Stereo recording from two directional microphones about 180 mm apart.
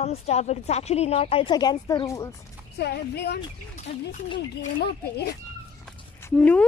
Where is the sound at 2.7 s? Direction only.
65° left (ahead or behind).